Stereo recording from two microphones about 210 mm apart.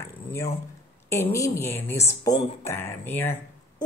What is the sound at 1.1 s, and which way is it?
Speech, 15° left (ahead or behind).